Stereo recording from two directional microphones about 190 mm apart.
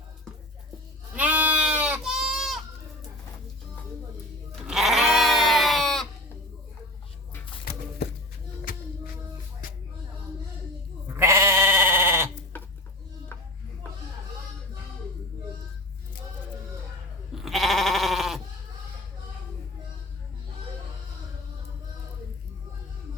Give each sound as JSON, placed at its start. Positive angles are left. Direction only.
{"t": 1.1, "sound": "goat", "side_deg": -5}
{"t": 4.6, "sound": "goat", "side_deg": 0}
{"t": 7.6, "sound": "a sound", "side_deg": 50}
{"t": 11.2, "sound": "sheep", "side_deg": -15}
{"t": 17.3, "sound": "goat", "side_deg": 0}